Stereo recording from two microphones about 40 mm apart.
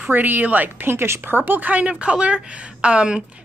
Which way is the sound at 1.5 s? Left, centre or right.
Right.